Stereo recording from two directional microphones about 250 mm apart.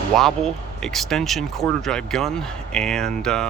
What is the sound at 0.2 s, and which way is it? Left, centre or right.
Speech, centre.